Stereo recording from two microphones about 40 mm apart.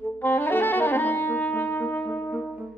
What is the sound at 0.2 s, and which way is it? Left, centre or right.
Music, left.